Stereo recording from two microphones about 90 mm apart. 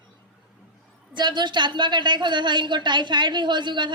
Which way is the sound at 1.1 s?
55° right (ahead or behind).